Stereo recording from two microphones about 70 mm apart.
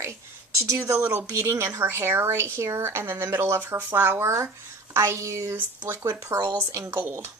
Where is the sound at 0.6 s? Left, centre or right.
Right.